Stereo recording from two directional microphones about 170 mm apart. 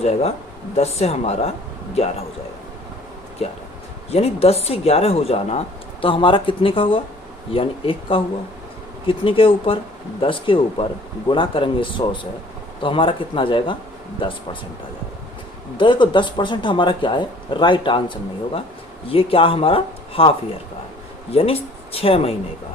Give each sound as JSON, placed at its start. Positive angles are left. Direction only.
{"t": 0.0, "sound": "speech", "side_deg": 40}
{"t": 4.1, "sound": "speech", "side_deg": 35}
{"t": 15.8, "sound": "speech", "side_deg": 30}
{"t": 21.3, "sound": "speech", "side_deg": 35}